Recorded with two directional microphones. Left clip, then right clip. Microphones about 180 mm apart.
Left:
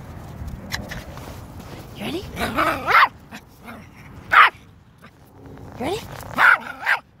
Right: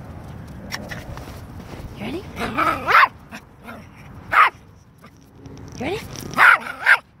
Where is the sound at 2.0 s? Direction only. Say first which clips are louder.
Left 2 dB; 15° left (ahead or behind).